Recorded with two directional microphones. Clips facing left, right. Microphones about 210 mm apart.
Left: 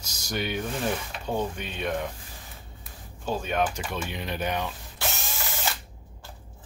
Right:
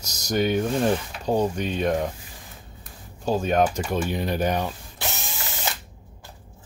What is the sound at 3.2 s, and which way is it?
Speech, 40° right (ahead or behind).